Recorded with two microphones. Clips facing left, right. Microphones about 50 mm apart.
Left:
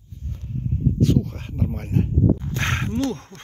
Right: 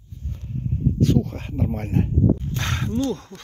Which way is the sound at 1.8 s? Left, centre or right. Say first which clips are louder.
Left 1 dB; centre.